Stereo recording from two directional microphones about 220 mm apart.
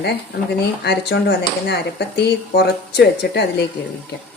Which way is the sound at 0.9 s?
50° left (ahead or behind).